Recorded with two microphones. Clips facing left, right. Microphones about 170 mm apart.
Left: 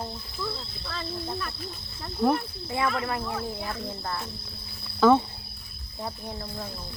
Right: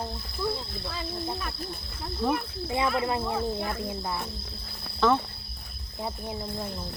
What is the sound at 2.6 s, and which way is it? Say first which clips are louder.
Speech: right 2 dB; 20° right (ahead or behind).